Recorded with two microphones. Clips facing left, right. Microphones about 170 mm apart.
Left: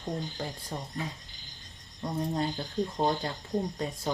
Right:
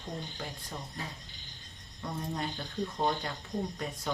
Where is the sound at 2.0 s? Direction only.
30° left (ahead or behind).